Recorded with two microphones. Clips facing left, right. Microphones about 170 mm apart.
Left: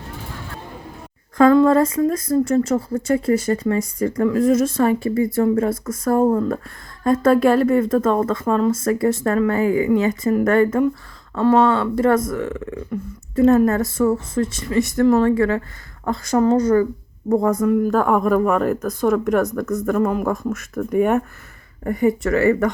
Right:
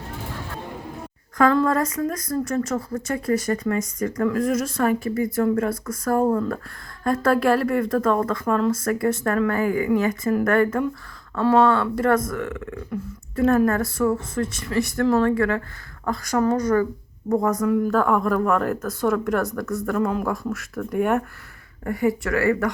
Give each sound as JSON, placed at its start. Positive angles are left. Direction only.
{"t": 1.4, "sound": "speech", "side_deg": 25}